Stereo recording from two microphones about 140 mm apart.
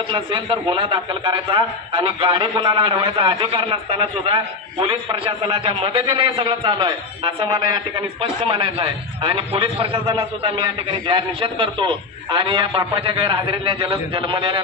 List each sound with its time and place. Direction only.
0.1 s a man's voice: 35° right (ahead or behind)